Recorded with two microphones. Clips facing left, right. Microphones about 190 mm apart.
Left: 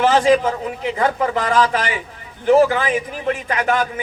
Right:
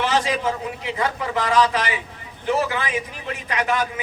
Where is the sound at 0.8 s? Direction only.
50° left (ahead or behind).